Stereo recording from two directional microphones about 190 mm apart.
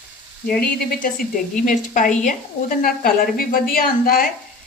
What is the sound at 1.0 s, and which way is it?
A woman's voice, 45° left (ahead or behind).